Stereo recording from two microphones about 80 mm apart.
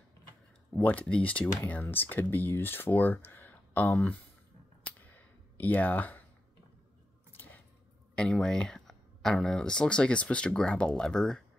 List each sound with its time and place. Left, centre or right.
0.7 s speech: centre
4.8 s cap gun: centre
7.3 s a sound: left
8.2 s speech: centre